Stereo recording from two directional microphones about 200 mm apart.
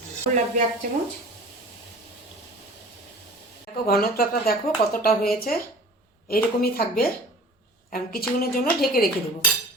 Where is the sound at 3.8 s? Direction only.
45° left (ahead or behind).